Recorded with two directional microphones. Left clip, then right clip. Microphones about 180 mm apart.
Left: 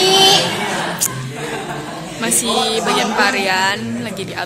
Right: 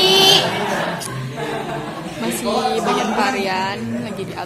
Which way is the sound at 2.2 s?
5° right (ahead or behind).